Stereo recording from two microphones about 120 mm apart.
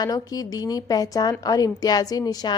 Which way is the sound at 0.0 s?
30° left (ahead or behind).